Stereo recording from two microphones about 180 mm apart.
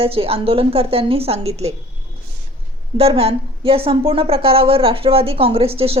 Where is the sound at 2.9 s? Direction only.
35° right (ahead or behind).